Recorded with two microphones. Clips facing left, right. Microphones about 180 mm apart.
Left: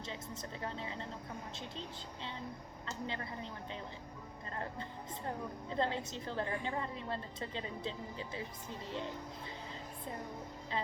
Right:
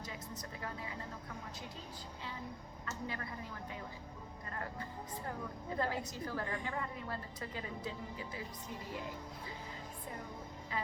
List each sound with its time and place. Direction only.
0.6 s a woman's voice: 25° left (ahead or behind)
2.8 s a woman's voice: 25° left (ahead or behind)